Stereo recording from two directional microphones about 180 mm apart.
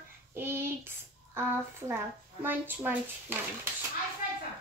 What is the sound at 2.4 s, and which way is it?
Speech, 10° right (ahead or behind).